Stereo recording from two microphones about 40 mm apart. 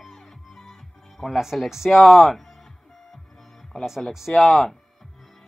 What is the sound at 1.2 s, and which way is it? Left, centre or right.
Speech, left.